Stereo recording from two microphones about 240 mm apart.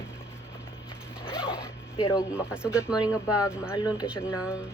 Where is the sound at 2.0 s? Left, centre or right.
Centre.